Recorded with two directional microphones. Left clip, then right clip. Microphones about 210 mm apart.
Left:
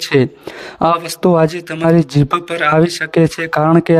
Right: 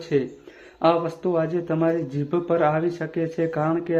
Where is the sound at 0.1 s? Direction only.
55° left (ahead or behind).